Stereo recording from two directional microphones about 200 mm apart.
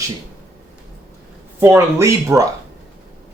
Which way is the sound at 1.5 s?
10° right (ahead or behind).